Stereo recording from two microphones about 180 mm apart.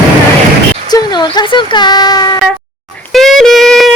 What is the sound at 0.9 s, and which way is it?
Speech, 25° left (ahead or behind).